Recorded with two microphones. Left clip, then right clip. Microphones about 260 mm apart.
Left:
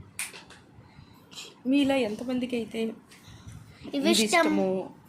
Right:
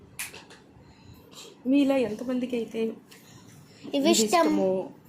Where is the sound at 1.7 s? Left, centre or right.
Left.